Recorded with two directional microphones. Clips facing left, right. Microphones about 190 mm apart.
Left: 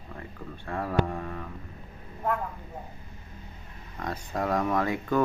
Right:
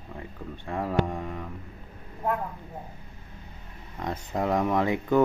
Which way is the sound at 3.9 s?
20° right (ahead or behind).